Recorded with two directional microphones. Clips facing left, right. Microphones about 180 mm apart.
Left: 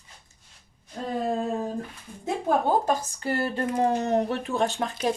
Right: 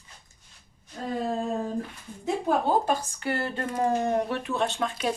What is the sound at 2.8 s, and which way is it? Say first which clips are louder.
Speech: left 1 dB; 35° left (ahead or behind).